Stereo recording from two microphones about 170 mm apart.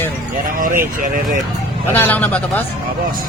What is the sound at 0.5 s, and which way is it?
Speech, 55° right (ahead or behind).